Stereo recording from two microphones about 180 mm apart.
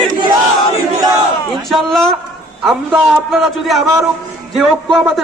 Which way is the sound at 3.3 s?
Centre (ahead or behind).